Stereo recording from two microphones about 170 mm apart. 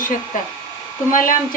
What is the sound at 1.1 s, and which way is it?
Speech, 55° left (ahead or behind).